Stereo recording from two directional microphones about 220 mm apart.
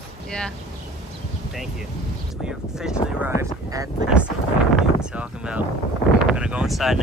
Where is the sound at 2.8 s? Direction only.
5° right (ahead or behind).